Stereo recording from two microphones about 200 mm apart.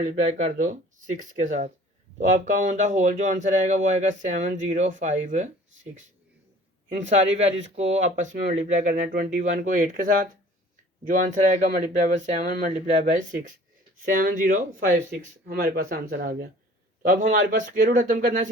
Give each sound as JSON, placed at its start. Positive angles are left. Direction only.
{"t": 0.0, "sound": "speech", "side_deg": -40}
{"t": 14.0, "sound": "speech", "side_deg": -45}